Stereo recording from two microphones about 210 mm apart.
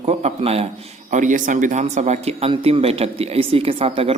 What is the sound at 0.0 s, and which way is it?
A man's voice, 30° right (ahead or behind).